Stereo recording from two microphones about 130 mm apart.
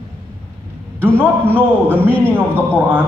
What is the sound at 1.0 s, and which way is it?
A man's voice, 15° right (ahead or behind).